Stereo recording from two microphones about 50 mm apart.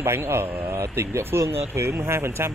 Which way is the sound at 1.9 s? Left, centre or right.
Right.